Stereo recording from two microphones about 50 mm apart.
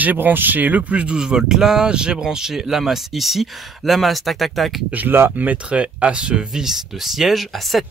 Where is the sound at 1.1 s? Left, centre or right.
Centre.